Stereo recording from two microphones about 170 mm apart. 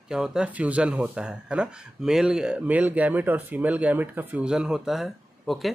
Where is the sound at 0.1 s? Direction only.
5° right (ahead or behind).